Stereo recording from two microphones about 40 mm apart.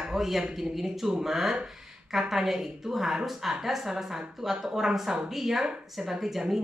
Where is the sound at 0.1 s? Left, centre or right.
Centre.